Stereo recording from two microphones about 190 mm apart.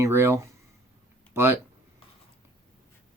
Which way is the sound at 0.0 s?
15° right (ahead or behind).